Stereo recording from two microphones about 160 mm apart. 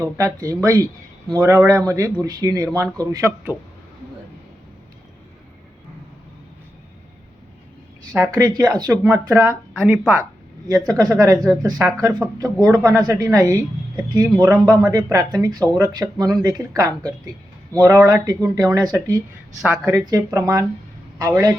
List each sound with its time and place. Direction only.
0.0 s speech: 20° right (ahead or behind)
8.2 s speech: 25° right (ahead or behind)
9.7 s speech: 5° right (ahead or behind)
10.7 s a woman's voice: 25° right (ahead or behind)